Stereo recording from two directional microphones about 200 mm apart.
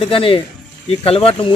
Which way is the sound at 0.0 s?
25° left (ahead or behind).